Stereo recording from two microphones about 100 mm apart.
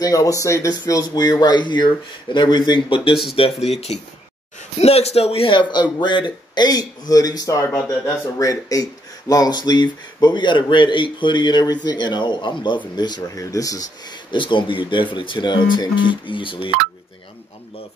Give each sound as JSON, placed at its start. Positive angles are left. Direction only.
{"t": 0.0, "sound": "a man's voice", "side_deg": 35}
{"t": 3.4, "sound": "speech", "side_deg": 70}
{"t": 4.7, "sound": "a man's voice", "side_deg": 90}
{"t": 14.3, "sound": "speech", "side_deg": 55}